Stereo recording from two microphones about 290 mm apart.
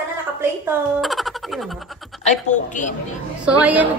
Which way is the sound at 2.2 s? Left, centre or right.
Left.